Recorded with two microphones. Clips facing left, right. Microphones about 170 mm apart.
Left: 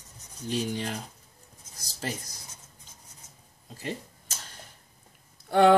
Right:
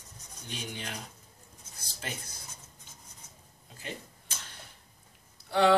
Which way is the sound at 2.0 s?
35° left (ahead or behind).